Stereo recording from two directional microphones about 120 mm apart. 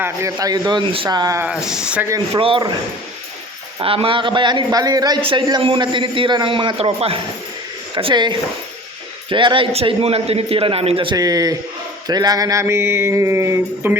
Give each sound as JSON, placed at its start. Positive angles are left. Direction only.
{"t": 0.0, "sound": "a man's voice", "side_deg": -25}
{"t": 1.5, "sound": "speech", "side_deg": -5}
{"t": 2.3, "sound": "a man's voice", "side_deg": -50}
{"t": 3.8, "sound": "a man's voice", "side_deg": -50}
{"t": 7.9, "sound": "a man's voice", "side_deg": -40}
{"t": 9.7, "sound": "a man's voice", "side_deg": -55}
{"t": 11.2, "sound": "a man's voice", "side_deg": -30}
{"t": 12.0, "sound": "mantra", "side_deg": -35}